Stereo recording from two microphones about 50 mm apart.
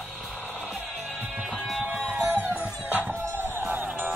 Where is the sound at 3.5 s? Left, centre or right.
Right.